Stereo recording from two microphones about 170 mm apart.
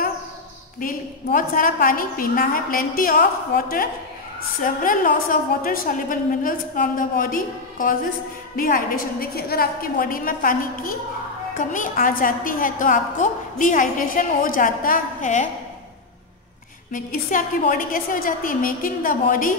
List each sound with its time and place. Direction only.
0.7 s a woman's voice: 55° left (ahead or behind)
16.9 s a woman's voice: 50° left (ahead or behind)